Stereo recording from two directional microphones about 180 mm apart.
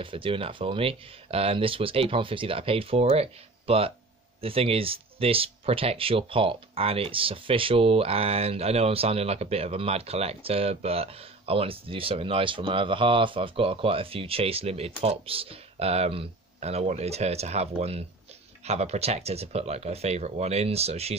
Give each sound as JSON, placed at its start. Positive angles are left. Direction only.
{"t": 0.0, "sound": "speech", "side_deg": -30}